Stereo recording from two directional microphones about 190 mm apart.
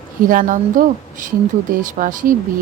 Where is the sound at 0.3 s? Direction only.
45° right (ahead or behind).